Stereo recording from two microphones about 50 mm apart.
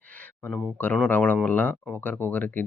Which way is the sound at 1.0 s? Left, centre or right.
Left.